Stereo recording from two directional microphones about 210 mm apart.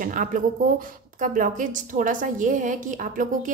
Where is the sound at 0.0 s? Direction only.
40° right (ahead or behind).